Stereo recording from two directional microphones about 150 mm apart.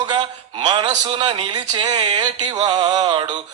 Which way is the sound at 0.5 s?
30° right (ahead or behind).